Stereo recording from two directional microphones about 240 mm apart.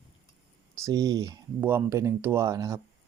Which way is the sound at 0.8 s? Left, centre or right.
Centre.